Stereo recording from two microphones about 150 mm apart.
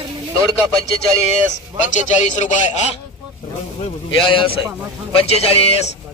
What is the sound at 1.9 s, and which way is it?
Speech, 55° left (ahead or behind).